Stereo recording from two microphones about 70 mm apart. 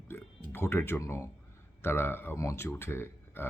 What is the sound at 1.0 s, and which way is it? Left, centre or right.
Speech, left.